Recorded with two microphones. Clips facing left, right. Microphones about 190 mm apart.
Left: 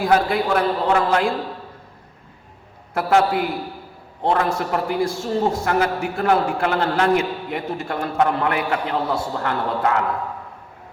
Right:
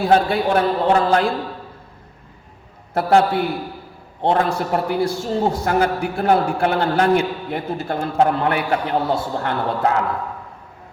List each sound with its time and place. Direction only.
0.0 s a man's voice: 30° right (ahead or behind)
2.9 s a man's voice: 35° right (ahead or behind)